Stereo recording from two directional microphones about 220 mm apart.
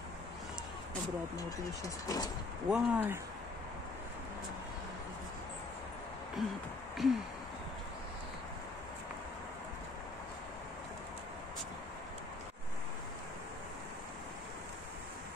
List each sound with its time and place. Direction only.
2.0 s speech: 15° left (ahead or behind)
2.7 s speech: 10° right (ahead or behind)
6.4 s a sound: centre (ahead or behind)